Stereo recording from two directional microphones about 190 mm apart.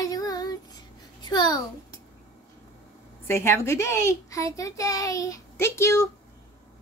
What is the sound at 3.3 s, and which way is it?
A child's voice, 15° left (ahead or behind).